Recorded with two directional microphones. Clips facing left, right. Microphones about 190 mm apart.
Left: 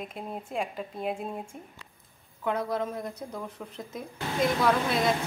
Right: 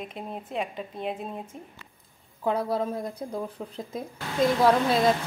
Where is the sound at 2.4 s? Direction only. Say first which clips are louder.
Right 3 dB; 35° right (ahead or behind).